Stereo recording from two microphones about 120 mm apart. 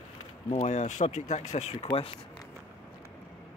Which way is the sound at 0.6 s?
75° left (ahead or behind).